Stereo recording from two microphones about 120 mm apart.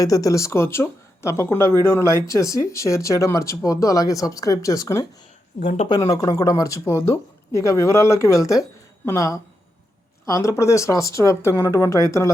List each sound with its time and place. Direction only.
0.0 s speech: 30° left (ahead or behind)
5.5 s speech: 80° left
6.0 s speech: 30° left (ahead or behind)